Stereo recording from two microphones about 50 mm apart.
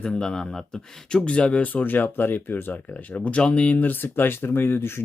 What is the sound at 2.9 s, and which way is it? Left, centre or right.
Speech, left.